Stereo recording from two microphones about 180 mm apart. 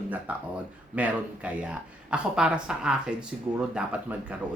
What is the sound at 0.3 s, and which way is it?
A man's voice, 10° right (ahead or behind).